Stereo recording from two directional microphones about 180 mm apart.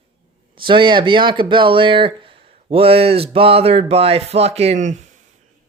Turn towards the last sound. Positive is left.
turn(degrees=-40)  # may be behind; listen again after turning